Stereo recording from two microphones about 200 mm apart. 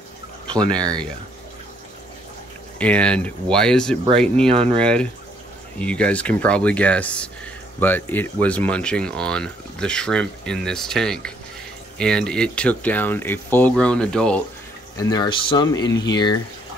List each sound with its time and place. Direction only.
2.8 s speech: 5° left (ahead or behind)
4.5 s speech: 30° right (ahead or behind)
4.7 s speech: 5° left (ahead or behind)
15.0 s speech: 20° left (ahead or behind)